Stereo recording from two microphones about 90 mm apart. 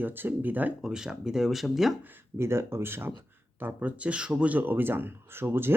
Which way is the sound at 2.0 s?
25° right (ahead or behind).